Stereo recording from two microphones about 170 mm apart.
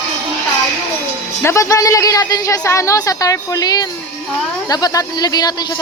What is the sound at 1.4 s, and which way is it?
A woman's voice, 20° left (ahead or behind).